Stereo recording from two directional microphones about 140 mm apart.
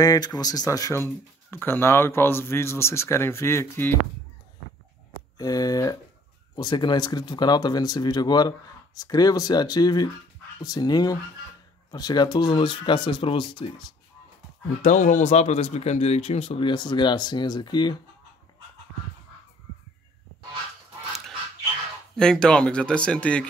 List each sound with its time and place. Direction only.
0.0 s speech: 25° left (ahead or behind)
5.4 s speech: 25° left (ahead or behind)
14.8 s speech: 60° left (ahead or behind); by 17.9 s 30° left (ahead or behind)
22.1 s speech: 5° left (ahead or behind)